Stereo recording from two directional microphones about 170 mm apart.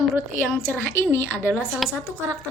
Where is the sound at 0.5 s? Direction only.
10° left (ahead or behind).